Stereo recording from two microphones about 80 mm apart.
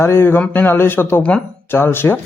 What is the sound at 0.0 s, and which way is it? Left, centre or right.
A man's voice, left.